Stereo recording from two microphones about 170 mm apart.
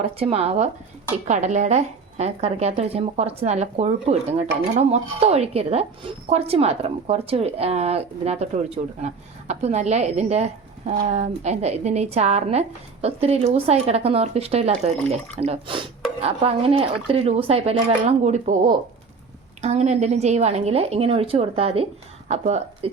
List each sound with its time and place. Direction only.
0.0 s a woman's voice: 35° right (ahead or behind)
19.6 s a woman's voice: 40° right (ahead or behind)